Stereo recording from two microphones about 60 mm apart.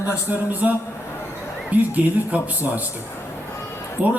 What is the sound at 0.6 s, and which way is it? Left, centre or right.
A man's voice, right.